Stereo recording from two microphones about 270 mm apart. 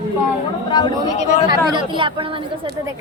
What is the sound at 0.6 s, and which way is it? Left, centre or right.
Speech, centre.